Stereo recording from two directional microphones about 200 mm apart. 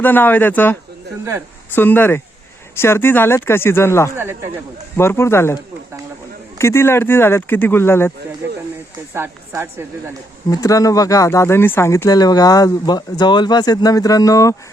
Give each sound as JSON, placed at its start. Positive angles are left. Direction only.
{"t": 0.0, "sound": "speech", "side_deg": 10}
{"t": 4.1, "sound": "speech", "side_deg": -10}
{"t": 4.9, "sound": "speech", "side_deg": 10}
{"t": 6.6, "sound": "speech", "side_deg": 15}
{"t": 9.1, "sound": "speech", "side_deg": -10}
{"t": 10.5, "sound": "speech", "side_deg": 15}